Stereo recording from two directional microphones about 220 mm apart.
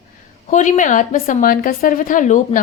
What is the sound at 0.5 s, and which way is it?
A woman's voice, 35° left (ahead or behind).